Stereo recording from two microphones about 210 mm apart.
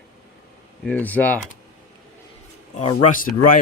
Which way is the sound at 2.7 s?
35° left (ahead or behind).